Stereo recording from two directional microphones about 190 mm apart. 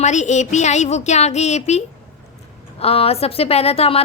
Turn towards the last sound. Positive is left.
turn(degrees=30)  # may be behind; listen again after turning